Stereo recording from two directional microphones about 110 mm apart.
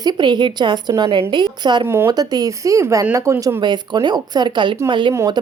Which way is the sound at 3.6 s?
40° right (ahead or behind).